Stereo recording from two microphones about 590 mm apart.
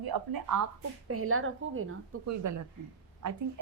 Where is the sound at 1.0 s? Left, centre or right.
Right.